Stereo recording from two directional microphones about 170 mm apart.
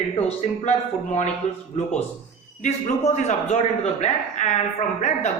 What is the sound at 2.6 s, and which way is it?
A man's voice, 45° left (ahead or behind).